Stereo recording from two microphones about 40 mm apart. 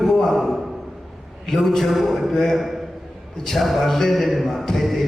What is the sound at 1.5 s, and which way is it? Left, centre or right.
Speech, centre.